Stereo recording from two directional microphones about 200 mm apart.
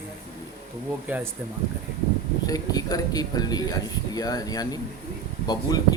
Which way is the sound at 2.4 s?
20° left (ahead or behind).